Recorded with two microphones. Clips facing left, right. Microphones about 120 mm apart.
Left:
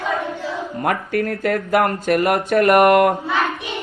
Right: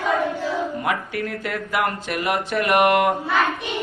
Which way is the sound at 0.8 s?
50° left (ahead or behind).